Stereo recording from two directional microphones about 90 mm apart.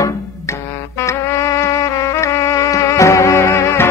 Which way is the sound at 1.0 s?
30° left (ahead or behind).